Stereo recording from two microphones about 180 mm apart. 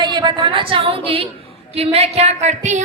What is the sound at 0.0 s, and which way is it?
A woman's voice, 25° right (ahead or behind).